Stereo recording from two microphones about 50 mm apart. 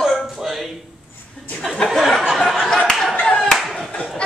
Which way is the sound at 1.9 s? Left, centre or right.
Centre.